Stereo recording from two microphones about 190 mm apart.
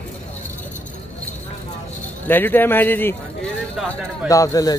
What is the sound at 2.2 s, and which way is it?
Speech, 10° left (ahead or behind).